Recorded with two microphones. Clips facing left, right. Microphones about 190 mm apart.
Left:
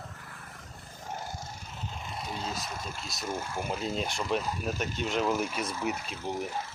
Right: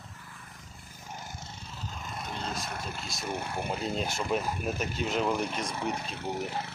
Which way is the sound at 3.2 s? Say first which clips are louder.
Even; 65° right (ahead or behind).